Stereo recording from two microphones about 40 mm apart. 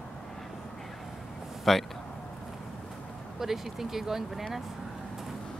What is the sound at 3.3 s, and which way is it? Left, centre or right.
Speech, centre.